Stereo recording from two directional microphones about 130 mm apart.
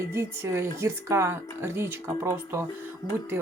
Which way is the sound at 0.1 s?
20° right (ahead or behind).